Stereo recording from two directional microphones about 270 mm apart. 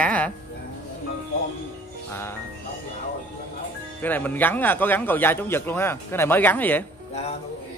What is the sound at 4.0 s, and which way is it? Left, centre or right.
Speech, centre.